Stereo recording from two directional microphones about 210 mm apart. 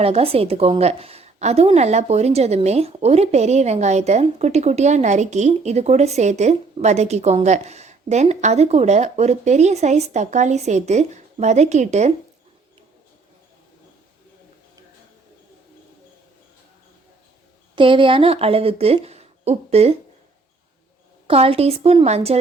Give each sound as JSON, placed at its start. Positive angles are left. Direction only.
{"t": 0.0, "sound": "a woman's voice", "side_deg": -30}
{"t": 17.7, "sound": "speech", "side_deg": -25}
{"t": 21.2, "sound": "speech", "side_deg": -25}